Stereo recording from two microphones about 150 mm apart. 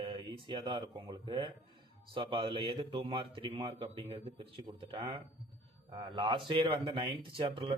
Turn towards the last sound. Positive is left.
turn(degrees=-35)  # may be behind; listen again after turning